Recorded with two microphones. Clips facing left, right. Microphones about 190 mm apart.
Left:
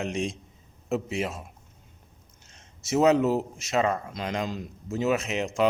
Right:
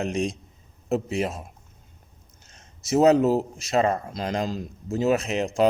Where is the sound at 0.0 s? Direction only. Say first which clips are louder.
Right 3 dB; 40° right (ahead or behind).